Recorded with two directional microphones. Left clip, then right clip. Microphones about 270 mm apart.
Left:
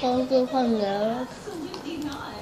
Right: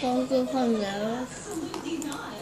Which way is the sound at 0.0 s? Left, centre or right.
Left.